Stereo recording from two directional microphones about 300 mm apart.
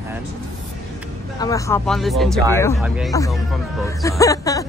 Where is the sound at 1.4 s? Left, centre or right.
Centre.